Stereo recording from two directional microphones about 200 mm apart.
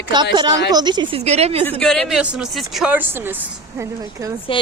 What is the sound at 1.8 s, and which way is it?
Speech, 5° left (ahead or behind).